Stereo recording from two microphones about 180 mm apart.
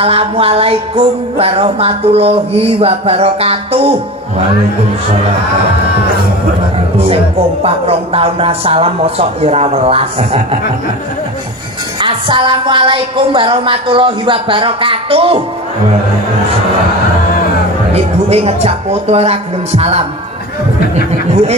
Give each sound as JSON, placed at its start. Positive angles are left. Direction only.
{"t": 0.0, "sound": "music", "side_deg": -30}
{"t": 7.0, "sound": "music", "side_deg": -35}
{"t": 12.0, "sound": "speech", "side_deg": -25}
{"t": 17.9, "sound": "music", "side_deg": -35}